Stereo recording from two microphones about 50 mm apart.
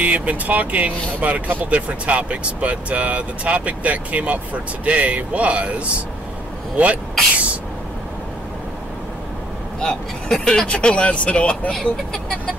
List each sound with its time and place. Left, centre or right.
0.0 s speech: right
6.8 s speech: right
9.8 s speech: centre
11.7 s speech: centre